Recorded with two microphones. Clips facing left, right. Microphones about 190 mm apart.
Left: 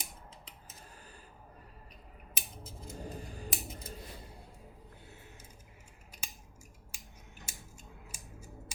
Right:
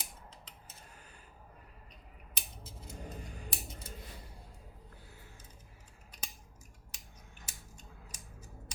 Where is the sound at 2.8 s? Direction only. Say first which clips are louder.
Left 3 dB; 30° left (ahead or behind).